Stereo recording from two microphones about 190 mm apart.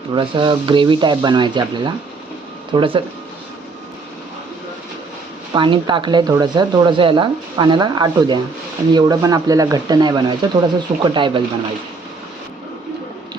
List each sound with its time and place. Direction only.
0.1 s speech: 25° right (ahead or behind)
5.5 s speech: 25° right (ahead or behind)